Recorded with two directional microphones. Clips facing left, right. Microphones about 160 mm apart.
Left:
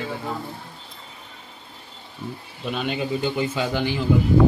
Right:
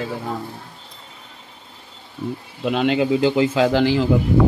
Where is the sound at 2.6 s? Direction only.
90° right.